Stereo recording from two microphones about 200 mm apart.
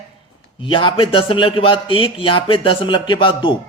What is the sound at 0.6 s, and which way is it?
A man's voice, 25° left (ahead or behind).